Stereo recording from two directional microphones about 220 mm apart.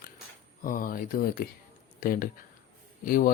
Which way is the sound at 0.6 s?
40° left (ahead or behind).